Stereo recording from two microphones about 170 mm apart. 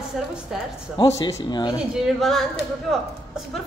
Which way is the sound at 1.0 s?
20° left (ahead or behind).